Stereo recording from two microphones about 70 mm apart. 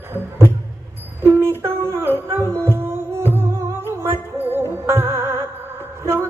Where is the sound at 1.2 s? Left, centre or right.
Right.